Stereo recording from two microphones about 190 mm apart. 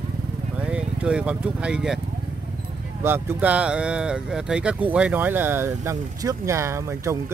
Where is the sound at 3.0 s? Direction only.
10° right (ahead or behind).